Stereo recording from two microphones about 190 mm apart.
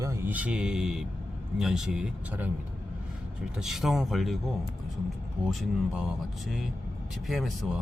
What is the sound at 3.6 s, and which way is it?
Speech, centre (ahead or behind).